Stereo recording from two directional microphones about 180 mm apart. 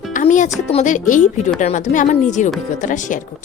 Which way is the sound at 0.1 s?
45° left (ahead or behind).